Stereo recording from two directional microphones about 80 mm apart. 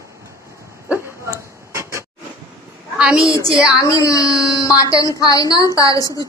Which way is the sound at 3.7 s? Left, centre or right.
Left.